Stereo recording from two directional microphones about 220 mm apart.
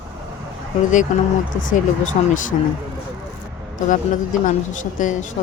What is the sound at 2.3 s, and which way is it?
Speech, 35° left (ahead or behind).